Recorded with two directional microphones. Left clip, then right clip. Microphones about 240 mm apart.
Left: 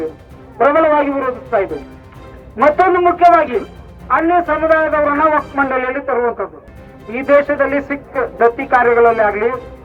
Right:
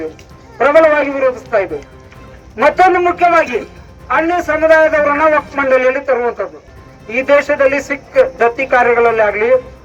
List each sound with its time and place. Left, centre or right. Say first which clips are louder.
0.6 s speech: right 2 dB; right